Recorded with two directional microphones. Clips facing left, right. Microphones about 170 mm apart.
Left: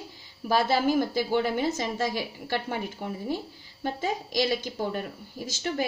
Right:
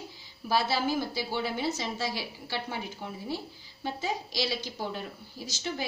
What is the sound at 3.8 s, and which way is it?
A woman's voice, 50° left (ahead or behind).